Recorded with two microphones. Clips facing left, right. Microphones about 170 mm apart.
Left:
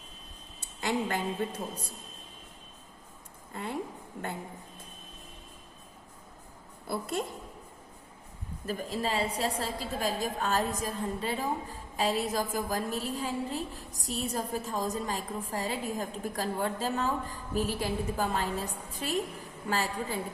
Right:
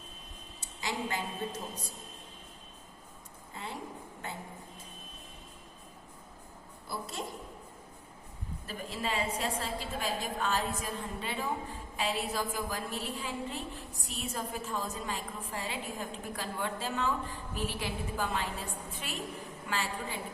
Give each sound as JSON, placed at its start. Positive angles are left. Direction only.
{"t": 0.6, "sound": "a woman's voice", "side_deg": 55}
{"t": 3.5, "sound": "speech", "side_deg": 55}
{"t": 6.8, "sound": "a woman's voice", "side_deg": 55}
{"t": 8.6, "sound": "a woman's voice", "side_deg": 40}